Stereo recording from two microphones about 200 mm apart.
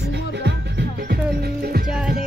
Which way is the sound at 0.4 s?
60° right (ahead or behind).